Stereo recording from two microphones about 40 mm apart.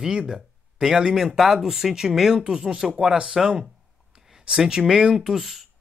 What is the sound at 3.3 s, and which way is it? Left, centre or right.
Speech, centre.